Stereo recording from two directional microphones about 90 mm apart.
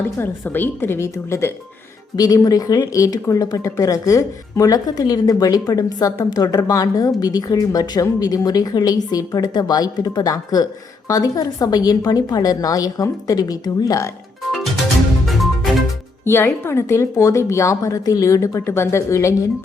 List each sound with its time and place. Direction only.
0.2 s speech: 20° left (ahead or behind)
2.1 s speech: 45° left (ahead or behind)
15.3 s music: centre (ahead or behind)
16.2 s a woman's voice: 25° left (ahead or behind)